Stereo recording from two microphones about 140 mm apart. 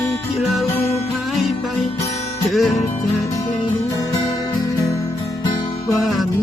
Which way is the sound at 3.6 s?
25° left (ahead or behind).